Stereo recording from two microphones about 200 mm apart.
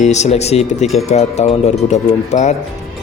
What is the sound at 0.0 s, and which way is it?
Speech, 35° left (ahead or behind).